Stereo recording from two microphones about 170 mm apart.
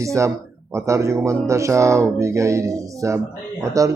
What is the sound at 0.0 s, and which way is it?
Speech, 20° right (ahead or behind).